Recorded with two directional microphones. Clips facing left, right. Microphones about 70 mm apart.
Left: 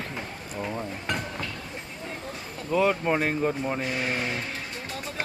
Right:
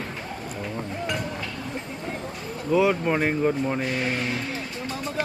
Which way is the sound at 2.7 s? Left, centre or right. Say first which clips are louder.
Right 2 dB; centre.